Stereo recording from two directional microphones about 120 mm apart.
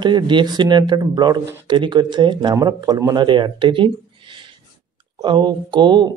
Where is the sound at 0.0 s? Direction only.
40° right (ahead or behind).